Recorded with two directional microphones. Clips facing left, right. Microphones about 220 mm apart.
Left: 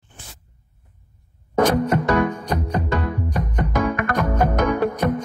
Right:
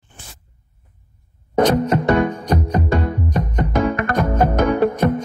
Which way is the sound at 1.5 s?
20° right (ahead or behind).